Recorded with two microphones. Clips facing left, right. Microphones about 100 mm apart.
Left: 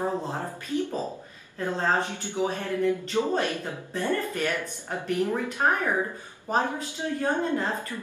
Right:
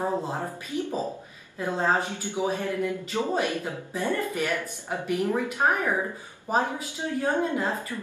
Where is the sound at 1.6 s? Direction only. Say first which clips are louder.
Right 1 dB; 10° right (ahead or behind).